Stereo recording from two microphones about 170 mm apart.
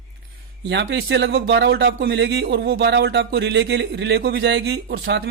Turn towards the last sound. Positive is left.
turn(degrees=-70)  # may be behind; listen again after turning